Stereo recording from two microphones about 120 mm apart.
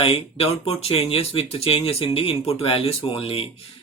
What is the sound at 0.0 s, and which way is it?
Speech, 50° left (ahead or behind).